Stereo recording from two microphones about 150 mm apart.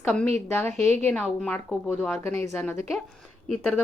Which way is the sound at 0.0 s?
10° left (ahead or behind).